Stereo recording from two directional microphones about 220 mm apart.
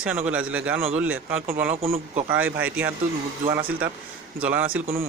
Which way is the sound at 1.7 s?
25° right (ahead or behind).